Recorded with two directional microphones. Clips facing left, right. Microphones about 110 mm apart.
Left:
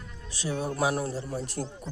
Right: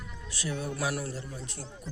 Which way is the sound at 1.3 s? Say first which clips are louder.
Left 9 dB; 50° left (ahead or behind).